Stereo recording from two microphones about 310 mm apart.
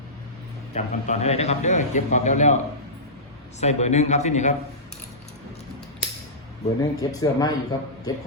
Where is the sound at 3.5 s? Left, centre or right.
Left.